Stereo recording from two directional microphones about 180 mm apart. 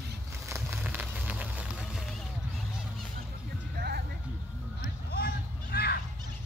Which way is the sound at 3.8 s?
60° right (ahead or behind).